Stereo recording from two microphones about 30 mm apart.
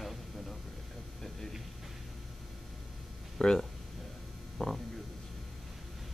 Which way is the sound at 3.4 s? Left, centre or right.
Centre.